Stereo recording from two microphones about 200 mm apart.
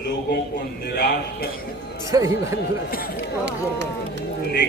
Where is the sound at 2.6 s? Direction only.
50° left (ahead or behind).